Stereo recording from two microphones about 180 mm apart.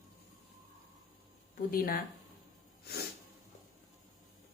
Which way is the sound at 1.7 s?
50° left (ahead or behind).